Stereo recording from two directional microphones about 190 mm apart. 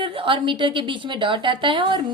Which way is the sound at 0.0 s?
30° right (ahead or behind).